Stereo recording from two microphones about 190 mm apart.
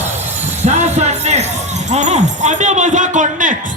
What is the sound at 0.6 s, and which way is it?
Music, 35° right (ahead or behind).